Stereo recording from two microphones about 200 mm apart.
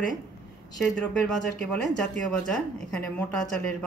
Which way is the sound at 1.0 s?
5° left (ahead or behind).